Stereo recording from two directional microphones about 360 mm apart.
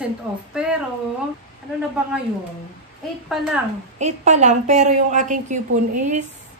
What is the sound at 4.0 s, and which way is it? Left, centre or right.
A woman's voice, centre.